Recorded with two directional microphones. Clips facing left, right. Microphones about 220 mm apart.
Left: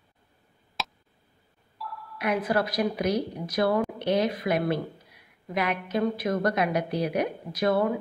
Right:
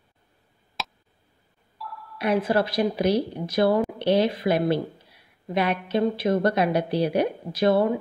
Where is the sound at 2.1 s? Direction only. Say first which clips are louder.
Right 4 dB; 30° right (ahead or behind).